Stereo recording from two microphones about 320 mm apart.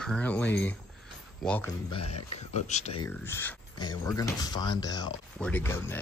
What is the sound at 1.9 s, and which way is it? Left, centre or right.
Speech, centre.